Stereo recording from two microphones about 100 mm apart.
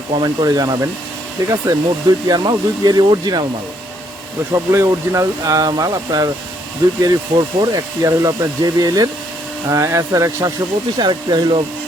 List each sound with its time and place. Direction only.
0.2 s speech: 40° right (ahead or behind)
4.5 s speech: 30° right (ahead or behind)
10.9 s speech: 45° right (ahead or behind)